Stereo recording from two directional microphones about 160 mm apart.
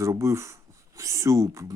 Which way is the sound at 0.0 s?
20° right (ahead or behind).